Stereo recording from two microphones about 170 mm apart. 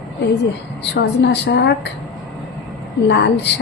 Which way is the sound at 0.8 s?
85° left.